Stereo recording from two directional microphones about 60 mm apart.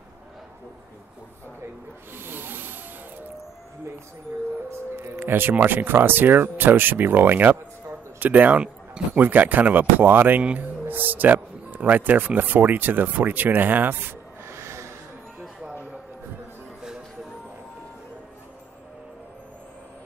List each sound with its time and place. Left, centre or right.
2.1 s snake: right
5.2 s speech: right
14.5 s snort: right
16.8 s music: centre